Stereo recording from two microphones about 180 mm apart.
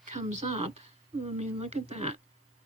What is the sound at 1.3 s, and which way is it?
Speech, 35° right (ahead or behind).